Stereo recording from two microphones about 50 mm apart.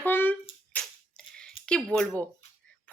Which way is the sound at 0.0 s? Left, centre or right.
Left.